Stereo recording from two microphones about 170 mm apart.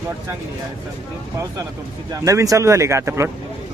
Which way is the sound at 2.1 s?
20° right (ahead or behind).